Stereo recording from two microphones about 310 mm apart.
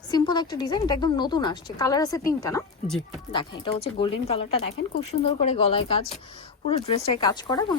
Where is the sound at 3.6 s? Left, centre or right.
Centre.